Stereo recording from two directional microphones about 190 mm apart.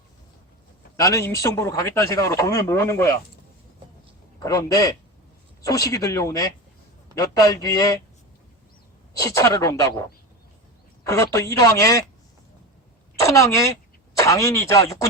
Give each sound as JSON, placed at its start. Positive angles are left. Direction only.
{"t": 0.9, "sound": "speech", "side_deg": 15}
{"t": 4.4, "sound": "a man's voice", "side_deg": 20}
{"t": 9.1, "sound": "speech", "side_deg": 15}
{"t": 13.1, "sound": "a woman's voice", "side_deg": 15}